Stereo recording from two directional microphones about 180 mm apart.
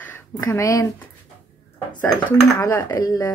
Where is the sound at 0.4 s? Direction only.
20° left (ahead or behind).